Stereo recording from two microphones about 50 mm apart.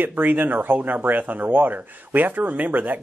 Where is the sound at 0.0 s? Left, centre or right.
Right.